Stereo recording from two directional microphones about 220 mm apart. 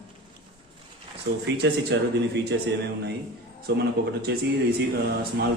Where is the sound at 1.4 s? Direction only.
50° right (ahead or behind).